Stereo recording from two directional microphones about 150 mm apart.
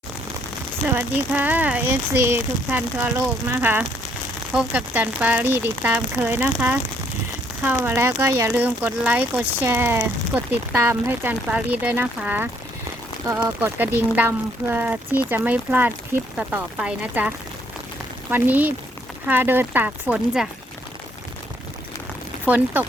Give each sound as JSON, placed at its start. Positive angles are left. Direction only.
{"t": 0.9, "sound": "speech", "side_deg": -10}
{"t": 22.4, "sound": "speech", "side_deg": -10}